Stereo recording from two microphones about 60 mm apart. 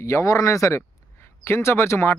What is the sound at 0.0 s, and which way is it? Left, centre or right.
Speech, left.